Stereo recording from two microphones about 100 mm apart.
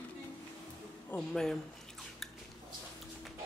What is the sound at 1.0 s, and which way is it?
Speech, 10° left (ahead or behind).